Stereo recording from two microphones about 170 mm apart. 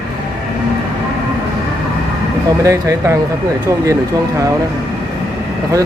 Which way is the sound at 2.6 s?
20° right (ahead or behind).